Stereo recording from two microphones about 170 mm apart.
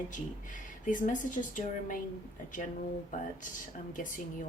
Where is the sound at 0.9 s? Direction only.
50° left (ahead or behind).